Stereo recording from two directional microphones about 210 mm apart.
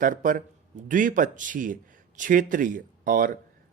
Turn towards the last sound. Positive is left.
turn(degrees=-40)  # may be behind; listen again after turning